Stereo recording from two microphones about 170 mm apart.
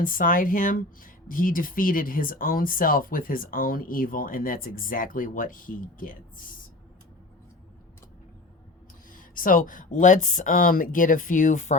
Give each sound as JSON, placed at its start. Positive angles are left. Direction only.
{"t": 0.0, "sound": "speech", "side_deg": 55}
{"t": 9.1, "sound": "speech", "side_deg": 55}